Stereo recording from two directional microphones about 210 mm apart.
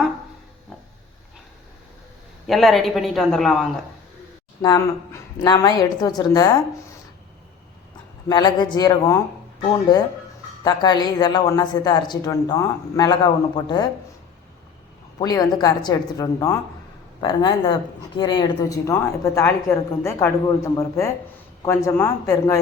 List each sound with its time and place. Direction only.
2.5 s speech: centre (ahead or behind)
4.6 s a man's voice: 20° left (ahead or behind)
8.3 s a man's voice: 20° left (ahead or behind)
15.2 s a man's voice: 15° left (ahead or behind)